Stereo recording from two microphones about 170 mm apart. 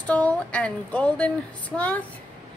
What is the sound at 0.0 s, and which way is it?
A woman's voice, 5° left (ahead or behind).